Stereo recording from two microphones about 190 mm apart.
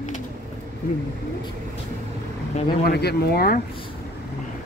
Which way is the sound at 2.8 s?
55° left (ahead or behind).